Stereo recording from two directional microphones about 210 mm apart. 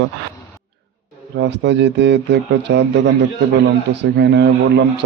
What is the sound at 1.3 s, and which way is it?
Speech, 55° right (ahead or behind).